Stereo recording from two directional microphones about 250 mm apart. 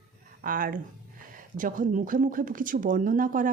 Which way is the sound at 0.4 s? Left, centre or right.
Right.